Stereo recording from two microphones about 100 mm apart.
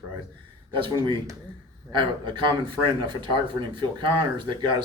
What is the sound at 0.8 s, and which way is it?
Speech, 50° right (ahead or behind).